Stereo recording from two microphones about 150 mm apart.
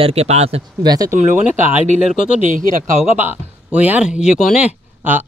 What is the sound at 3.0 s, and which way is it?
Speech, centre (ahead or behind).